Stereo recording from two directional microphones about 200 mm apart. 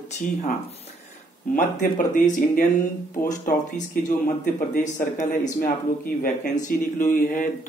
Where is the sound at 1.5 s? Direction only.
40° left (ahead or behind).